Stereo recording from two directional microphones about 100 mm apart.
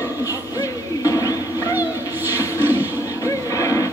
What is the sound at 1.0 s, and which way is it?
Music, 35° left (ahead or behind).